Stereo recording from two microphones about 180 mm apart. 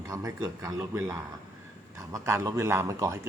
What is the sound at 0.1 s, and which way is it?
A man's voice, 20° right (ahead or behind).